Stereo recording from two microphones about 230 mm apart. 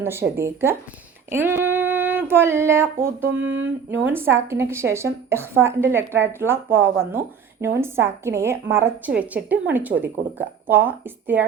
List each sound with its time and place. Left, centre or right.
0.0 s a woman's voice: centre
1.3 s female singing: centre
3.2 s a sound: right
4.0 s a woman's voice: centre